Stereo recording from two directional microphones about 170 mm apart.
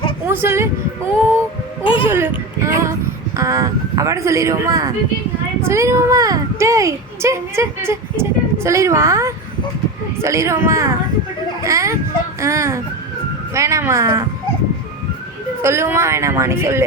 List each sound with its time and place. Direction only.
0.3 s a woman's voice: 15° right (ahead or behind)
1.8 s speech: 30° left (ahead or behind)
2.0 s speech: 15° right (ahead or behind)
2.6 s a sound: 15° right (ahead or behind)
3.3 s a child's voice: 20° right (ahead or behind)
15.6 s speech: 15° right (ahead or behind)